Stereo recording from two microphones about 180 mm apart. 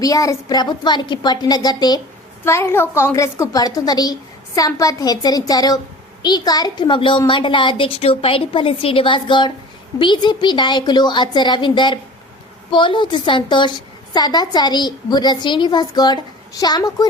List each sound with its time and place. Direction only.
0.0 s a woman's voice: 20° left (ahead or behind)